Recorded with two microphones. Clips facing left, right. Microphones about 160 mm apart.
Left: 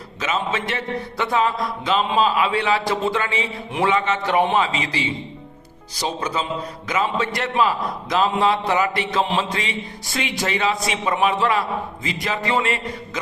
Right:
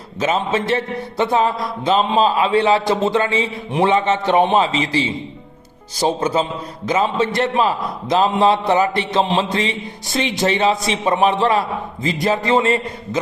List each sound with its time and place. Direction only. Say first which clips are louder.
0.2 s a man's voice: right 5 dB; 30° right (ahead or behind)
6.1 s a man's voice: right 5 dB; 25° right (ahead or behind)